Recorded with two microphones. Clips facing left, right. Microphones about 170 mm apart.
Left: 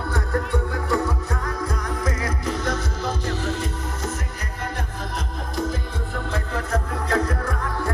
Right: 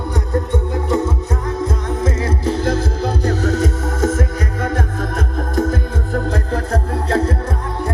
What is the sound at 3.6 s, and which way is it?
Music, 90° right.